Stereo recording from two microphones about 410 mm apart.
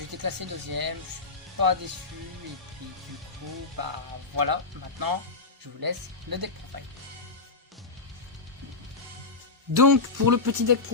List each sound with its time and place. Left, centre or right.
0.2 s speech: right
3.8 s speech: right
9.7 s speech: right